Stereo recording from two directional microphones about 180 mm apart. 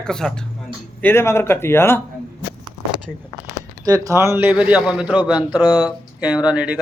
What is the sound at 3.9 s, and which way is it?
A man's voice, 20° right (ahead or behind).